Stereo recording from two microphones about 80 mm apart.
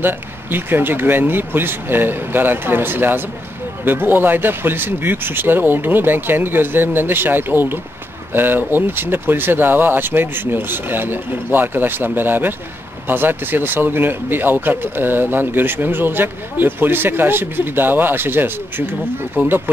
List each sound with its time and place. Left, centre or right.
0.0 s speech: right